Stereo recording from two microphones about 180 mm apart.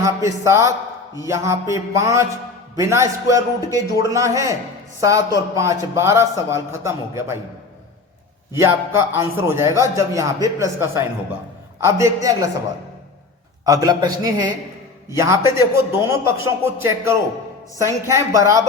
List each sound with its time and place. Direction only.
0.0 s speech: 15° right (ahead or behind)
9.0 s speech: 15° right (ahead or behind)
13.7 s a man's voice: 20° right (ahead or behind)